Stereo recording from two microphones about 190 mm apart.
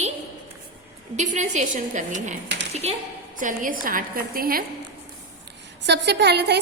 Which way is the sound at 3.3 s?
45° right (ahead or behind).